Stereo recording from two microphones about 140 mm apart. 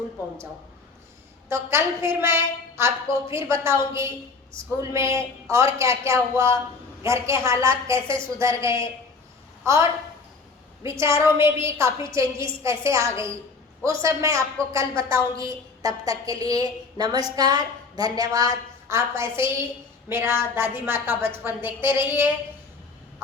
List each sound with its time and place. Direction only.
1.5 s a woman's voice: 20° right (ahead or behind)
4.8 s a woman's voice: 20° right (ahead or behind)
10.8 s a woman's voice: 20° right (ahead or behind)